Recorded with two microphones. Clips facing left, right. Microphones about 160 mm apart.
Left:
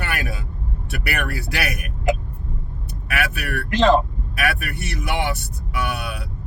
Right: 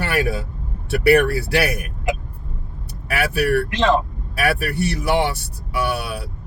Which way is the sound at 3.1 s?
35° right (ahead or behind).